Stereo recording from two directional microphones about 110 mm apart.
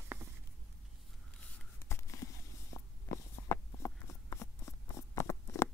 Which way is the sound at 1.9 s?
25° left (ahead or behind).